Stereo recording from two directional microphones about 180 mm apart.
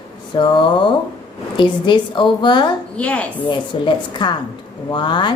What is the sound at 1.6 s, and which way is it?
A woman's voice, 25° left (ahead or behind).